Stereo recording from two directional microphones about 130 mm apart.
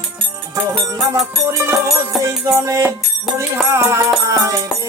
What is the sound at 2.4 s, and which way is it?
Music, 25° right (ahead or behind).